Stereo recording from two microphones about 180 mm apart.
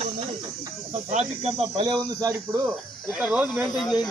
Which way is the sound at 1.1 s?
40° right (ahead or behind).